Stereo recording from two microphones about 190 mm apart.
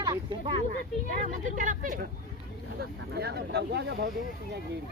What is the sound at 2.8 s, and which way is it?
Speech, 55° right (ahead or behind).